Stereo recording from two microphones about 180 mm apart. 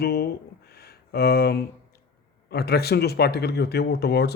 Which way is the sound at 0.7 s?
60° left (ahead or behind).